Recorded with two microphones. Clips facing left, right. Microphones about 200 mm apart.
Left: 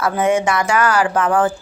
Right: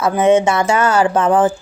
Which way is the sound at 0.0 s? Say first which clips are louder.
Right 4 dB; 20° right (ahead or behind).